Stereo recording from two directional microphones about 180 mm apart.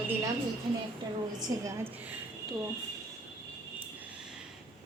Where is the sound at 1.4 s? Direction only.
15° right (ahead or behind).